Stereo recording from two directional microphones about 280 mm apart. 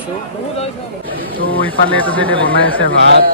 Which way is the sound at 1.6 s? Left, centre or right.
Centre.